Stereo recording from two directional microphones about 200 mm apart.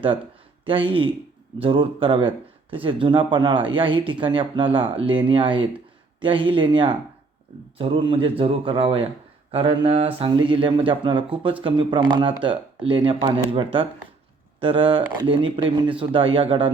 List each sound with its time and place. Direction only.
0.6 s speech: 25° right (ahead or behind)